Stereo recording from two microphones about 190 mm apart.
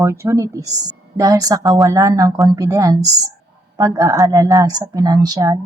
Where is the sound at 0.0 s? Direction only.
15° right (ahead or behind).